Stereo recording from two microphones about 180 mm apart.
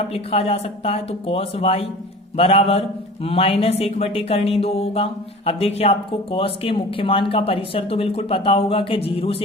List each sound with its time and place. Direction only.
0.1 s speech: 35° left (ahead or behind)